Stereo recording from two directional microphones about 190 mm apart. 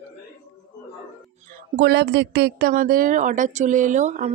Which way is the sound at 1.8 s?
60° right (ahead or behind).